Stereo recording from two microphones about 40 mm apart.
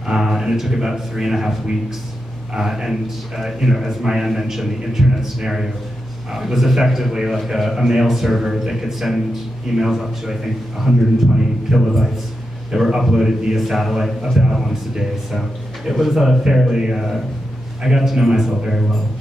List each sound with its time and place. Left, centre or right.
0.1 s speech: centre
2.5 s a man's voice: centre
13.6 s a man's voice: centre